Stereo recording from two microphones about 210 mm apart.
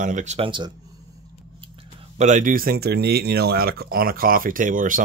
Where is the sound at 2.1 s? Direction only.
35° right (ahead or behind).